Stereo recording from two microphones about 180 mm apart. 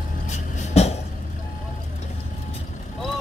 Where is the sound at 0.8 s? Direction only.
35° left (ahead or behind).